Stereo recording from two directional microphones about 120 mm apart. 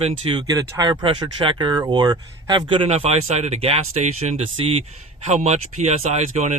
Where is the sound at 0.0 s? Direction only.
50° right (ahead or behind).